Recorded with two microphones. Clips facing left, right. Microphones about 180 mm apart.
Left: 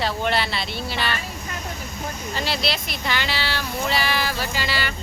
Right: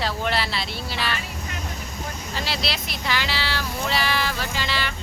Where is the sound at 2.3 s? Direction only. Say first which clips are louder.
Left 3 dB; centre (ahead or behind).